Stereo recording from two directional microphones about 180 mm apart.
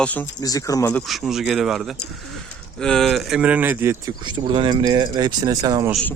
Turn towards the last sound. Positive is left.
turn(degrees=-20)  # may be behind; listen again after turning